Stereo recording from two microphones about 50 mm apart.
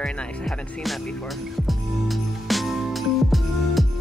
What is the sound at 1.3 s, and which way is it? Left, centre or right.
Music, centre.